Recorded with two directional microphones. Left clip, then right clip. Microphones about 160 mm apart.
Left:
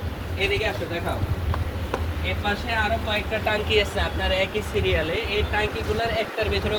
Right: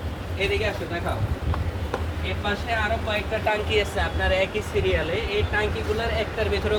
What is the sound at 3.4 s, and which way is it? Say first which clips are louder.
Speech: left 1 dB; centre (ahead or behind).